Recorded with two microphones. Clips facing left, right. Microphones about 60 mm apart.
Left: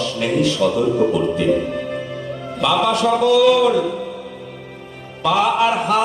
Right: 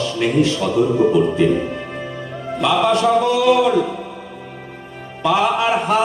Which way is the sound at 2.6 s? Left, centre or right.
Right.